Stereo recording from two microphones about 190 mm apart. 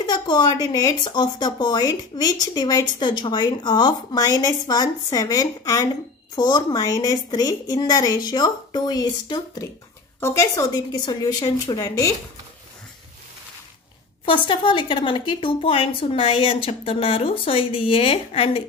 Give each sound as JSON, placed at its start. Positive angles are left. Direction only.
{"t": 0.0, "sound": "a woman's voice", "side_deg": 20}
{"t": 14.2, "sound": "a woman's voice", "side_deg": 25}